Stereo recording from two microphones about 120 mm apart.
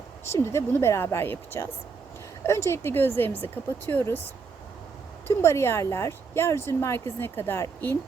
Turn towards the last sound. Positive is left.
turn(degrees=20)  # may be behind; listen again after turning